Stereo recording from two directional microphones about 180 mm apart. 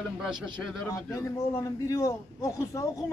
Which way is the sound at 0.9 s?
15° left (ahead or behind).